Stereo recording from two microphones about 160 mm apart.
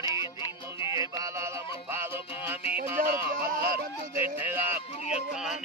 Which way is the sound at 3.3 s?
60° right (ahead or behind).